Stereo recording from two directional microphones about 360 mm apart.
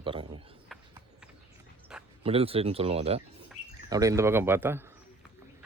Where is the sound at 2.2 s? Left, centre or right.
Centre.